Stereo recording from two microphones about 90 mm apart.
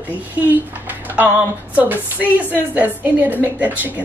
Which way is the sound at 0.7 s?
20° right (ahead or behind).